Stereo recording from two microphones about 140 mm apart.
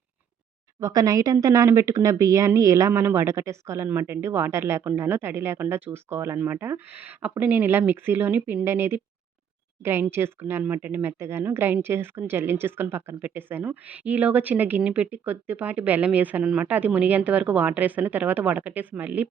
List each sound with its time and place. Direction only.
0.8 s speech: 25° right (ahead or behind)